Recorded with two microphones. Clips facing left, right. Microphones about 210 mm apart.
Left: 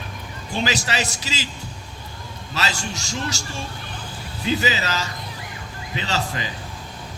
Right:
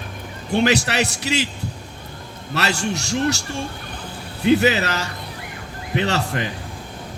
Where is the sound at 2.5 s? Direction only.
65° right (ahead or behind).